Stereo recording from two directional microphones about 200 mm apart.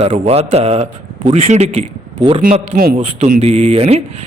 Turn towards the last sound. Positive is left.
turn(degrees=-30)  # may be behind; listen again after turning